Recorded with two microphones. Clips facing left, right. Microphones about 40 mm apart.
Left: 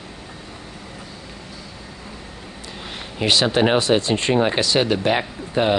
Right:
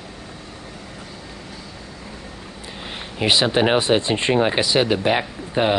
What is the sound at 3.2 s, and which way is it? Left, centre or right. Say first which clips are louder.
Speech: even; centre.